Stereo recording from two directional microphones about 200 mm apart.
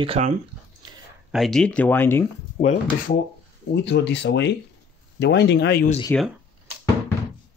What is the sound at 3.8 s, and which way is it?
Speech, 60° left (ahead or behind).